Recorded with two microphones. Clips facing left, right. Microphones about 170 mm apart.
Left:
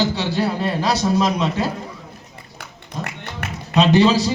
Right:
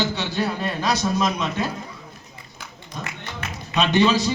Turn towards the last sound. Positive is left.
turn(degrees=35)  # may be behind; listen again after turning